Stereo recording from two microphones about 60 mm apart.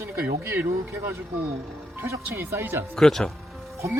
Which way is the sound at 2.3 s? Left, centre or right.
Right.